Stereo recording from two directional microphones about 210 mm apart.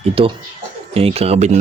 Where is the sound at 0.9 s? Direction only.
25° right (ahead or behind).